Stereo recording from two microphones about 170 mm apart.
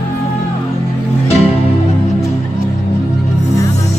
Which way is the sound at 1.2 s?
35° left (ahead or behind).